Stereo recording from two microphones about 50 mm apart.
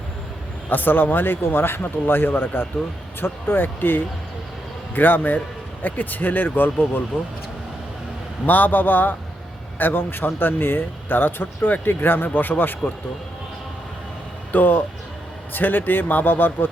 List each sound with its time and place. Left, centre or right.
0.7 s speech: left
8.4 s speech: left
14.5 s speech: left